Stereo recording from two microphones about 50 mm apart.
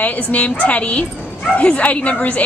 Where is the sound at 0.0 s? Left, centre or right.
Left.